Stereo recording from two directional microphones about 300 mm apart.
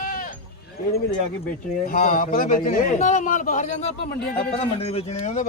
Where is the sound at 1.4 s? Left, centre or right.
Left.